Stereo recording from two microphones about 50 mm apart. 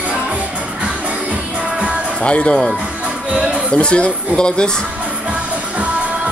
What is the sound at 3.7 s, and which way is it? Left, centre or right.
Speech, left.